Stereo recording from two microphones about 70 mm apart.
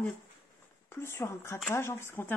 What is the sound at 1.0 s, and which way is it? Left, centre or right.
A woman's voice, left.